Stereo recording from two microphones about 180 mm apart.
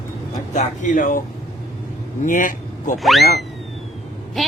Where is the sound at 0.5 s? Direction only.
45° left (ahead or behind).